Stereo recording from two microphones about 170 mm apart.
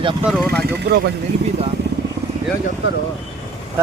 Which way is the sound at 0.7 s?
70° right (ahead or behind).